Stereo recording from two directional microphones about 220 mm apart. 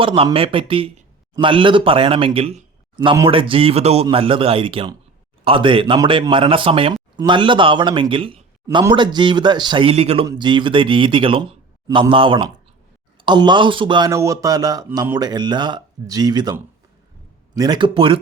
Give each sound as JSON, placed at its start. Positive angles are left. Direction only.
{"t": 0.0, "sound": "a man's voice", "side_deg": -20}